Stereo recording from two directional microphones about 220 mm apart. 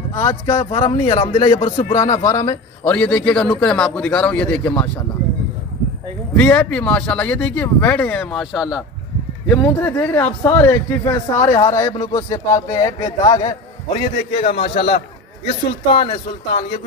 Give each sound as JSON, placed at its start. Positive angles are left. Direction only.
{"t": 0.1, "sound": "a man's voice", "side_deg": 20}
{"t": 6.3, "sound": "speech", "side_deg": 5}
{"t": 9.5, "sound": "a man's voice", "side_deg": 5}
{"t": 14.4, "sound": "speech", "side_deg": 30}